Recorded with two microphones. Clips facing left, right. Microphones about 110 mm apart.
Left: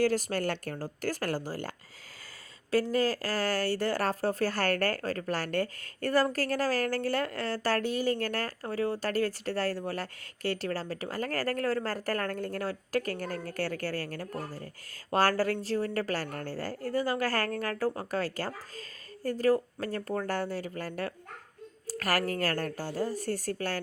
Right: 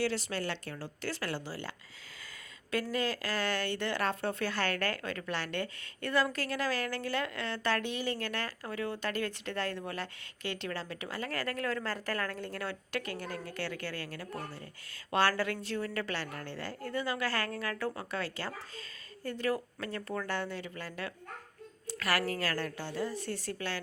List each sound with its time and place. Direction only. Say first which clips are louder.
0.0 s a woman's voice: left 6 dB; 45° left (ahead or behind)
2.9 s a woman's voice: left 5 dB; 40° left (ahead or behind)